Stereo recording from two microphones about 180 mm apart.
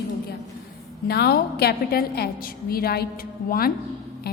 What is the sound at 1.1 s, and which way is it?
A woman's voice, 60° left (ahead or behind).